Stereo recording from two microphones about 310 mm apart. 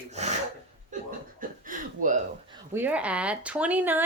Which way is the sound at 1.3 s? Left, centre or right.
Right.